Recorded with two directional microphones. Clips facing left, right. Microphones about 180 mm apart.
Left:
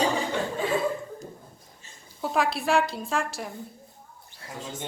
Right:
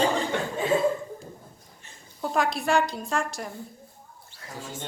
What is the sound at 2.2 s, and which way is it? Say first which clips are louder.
A woman's voice: even; centre (ahead or behind).